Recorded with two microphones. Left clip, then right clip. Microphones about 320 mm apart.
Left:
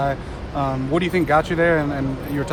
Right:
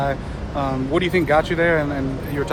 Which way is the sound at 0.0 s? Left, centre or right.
Left.